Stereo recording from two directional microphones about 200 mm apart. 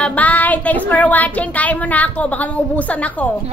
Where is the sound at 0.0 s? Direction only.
5° left (ahead or behind).